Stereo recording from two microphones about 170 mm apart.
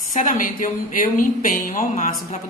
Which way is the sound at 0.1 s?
50° left (ahead or behind).